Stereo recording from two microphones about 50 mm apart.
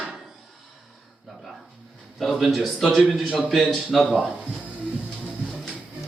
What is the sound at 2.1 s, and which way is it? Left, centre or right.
A man's voice, centre.